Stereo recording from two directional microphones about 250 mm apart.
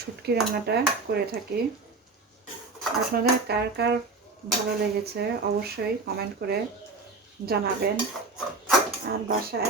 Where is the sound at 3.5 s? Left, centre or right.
Right.